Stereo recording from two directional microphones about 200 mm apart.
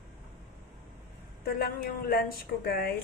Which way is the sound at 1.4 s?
50° left (ahead or behind).